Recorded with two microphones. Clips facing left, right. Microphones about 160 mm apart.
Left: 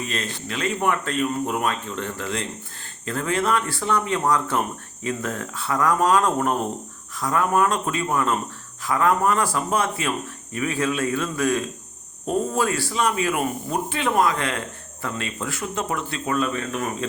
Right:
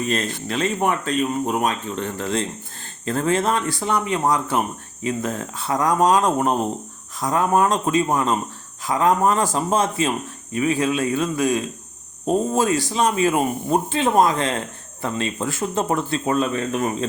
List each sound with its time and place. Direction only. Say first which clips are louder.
0.1 s speech: right 6 dB; 35° right (ahead or behind); by 2.0 s 20° right (ahead or behind)
2.1 s speech: right 4 dB; 30° right (ahead or behind)